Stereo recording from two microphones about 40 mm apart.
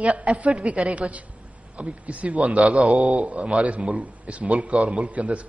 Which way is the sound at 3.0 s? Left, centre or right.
Right.